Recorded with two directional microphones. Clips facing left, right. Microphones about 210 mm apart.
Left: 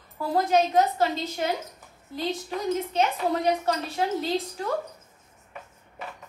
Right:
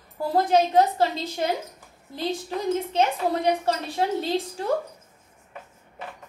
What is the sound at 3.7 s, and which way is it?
Speech, 30° right (ahead or behind).